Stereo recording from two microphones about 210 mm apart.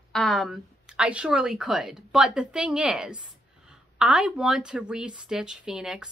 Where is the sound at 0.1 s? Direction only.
Centre (ahead or behind).